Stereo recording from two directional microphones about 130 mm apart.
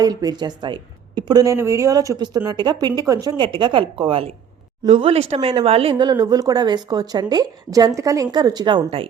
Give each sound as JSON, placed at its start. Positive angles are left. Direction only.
{"t": 0.0, "sound": "speech", "side_deg": -30}